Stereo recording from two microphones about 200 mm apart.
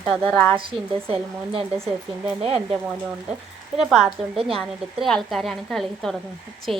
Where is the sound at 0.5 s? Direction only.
25° right (ahead or behind).